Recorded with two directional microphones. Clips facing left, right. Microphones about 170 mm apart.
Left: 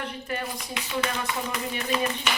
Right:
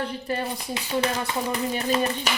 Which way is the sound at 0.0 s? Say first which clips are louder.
Right 4 dB; 35° right (ahead or behind).